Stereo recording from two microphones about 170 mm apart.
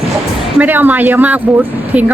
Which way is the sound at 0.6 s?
10° right (ahead or behind).